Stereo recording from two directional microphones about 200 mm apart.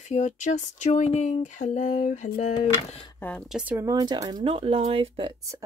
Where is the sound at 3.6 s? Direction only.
10° right (ahead or behind).